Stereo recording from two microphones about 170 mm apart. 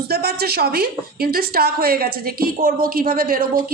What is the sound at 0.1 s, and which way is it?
A woman's voice, 70° right (ahead or behind).